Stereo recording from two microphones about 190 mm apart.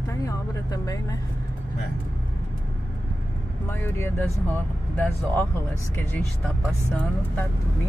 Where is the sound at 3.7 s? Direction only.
10° left (ahead or behind).